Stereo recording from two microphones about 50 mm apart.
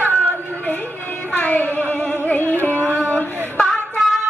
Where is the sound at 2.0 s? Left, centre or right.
Left.